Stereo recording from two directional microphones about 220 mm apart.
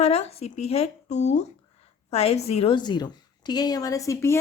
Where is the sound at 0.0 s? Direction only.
30° left (ahead or behind).